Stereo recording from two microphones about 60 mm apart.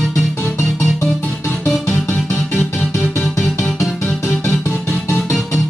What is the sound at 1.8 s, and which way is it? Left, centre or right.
Music, left.